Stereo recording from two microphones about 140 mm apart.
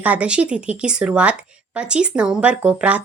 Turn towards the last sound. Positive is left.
turn(degrees=-10)  # may be behind; listen again after turning